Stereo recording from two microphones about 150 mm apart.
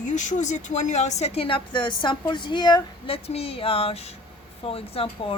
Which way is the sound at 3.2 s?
40° left (ahead or behind).